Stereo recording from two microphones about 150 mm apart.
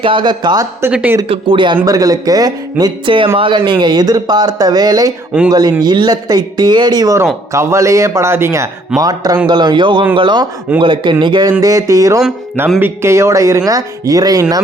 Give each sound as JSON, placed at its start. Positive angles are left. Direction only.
{"t": 0.0, "sound": "speech", "side_deg": -35}
{"t": 1.3, "sound": "a man's voice", "side_deg": -35}